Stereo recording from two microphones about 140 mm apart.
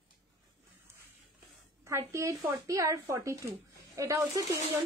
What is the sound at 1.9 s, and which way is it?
A woman's voice, 20° right (ahead or behind).